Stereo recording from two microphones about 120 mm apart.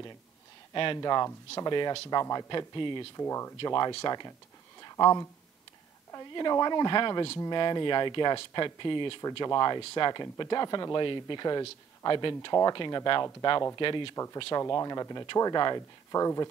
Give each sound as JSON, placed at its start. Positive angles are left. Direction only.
{"t": 0.9, "sound": "speech", "side_deg": 35}
{"t": 3.2, "sound": "speech", "side_deg": 25}
{"t": 13.7, "sound": "speech", "side_deg": 45}
{"t": 14.1, "sound": "speech", "side_deg": 25}